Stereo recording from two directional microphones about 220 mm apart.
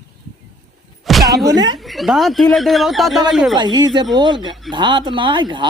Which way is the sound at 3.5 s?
20° right (ahead or behind).